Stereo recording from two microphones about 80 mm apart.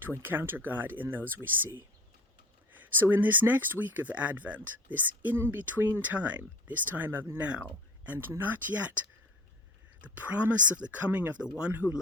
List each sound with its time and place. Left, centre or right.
0.0 s speech: right